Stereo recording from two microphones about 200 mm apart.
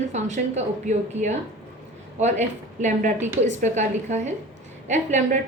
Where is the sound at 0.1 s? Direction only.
35° right (ahead or behind).